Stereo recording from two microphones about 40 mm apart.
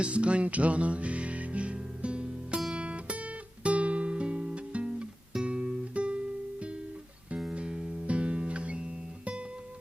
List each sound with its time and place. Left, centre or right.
0.0 s music: right
2.7 s guitar: right
5.9 s music: right
7.5 s music: right